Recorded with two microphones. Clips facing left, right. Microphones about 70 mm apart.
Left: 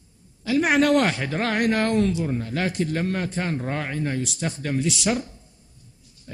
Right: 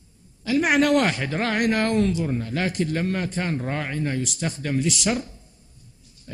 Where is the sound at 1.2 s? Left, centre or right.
Centre.